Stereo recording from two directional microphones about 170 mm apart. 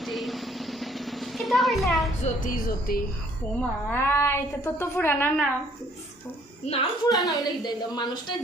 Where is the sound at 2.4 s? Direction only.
55° left (ahead or behind).